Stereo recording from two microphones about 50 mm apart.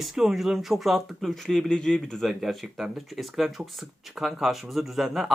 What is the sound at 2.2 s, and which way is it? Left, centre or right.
Speech, centre.